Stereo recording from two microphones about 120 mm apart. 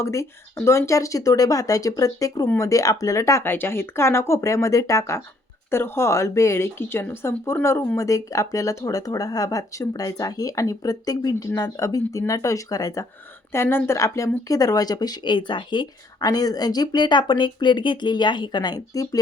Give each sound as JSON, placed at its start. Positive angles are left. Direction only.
{"t": 0.0, "sound": "speech", "side_deg": 25}